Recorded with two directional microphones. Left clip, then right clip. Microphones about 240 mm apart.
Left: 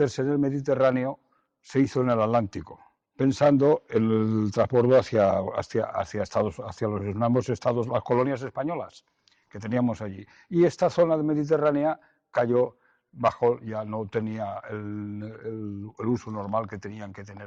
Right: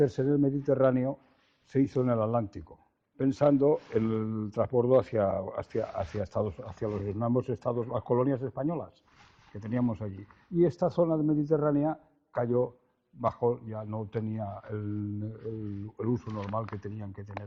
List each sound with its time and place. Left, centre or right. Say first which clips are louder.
0.0 s speech: left 2 dB; left